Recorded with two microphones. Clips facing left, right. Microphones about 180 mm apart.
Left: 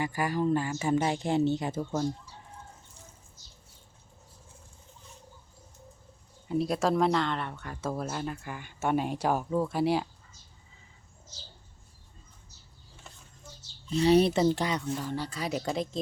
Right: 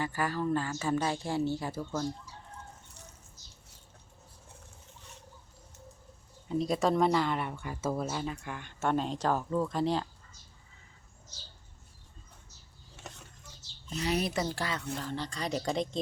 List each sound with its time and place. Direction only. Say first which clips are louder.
0.0 s a woman's voice: left 3 dB; 15° left (ahead or behind)
6.5 s speech: left 1 dB; 5° left (ahead or behind)
13.0 s a sound: right 5 dB; 75° right (ahead or behind)
13.9 s speech: left 9 dB; 30° left (ahead or behind); by 16.0 s centre (ahead or behind)